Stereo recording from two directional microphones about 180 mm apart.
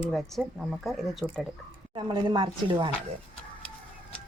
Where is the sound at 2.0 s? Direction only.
30° right (ahead or behind).